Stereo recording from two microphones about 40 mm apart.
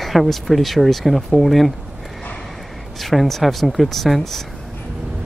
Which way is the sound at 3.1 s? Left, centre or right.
Centre.